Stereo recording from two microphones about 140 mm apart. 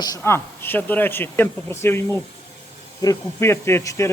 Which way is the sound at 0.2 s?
15° left (ahead or behind).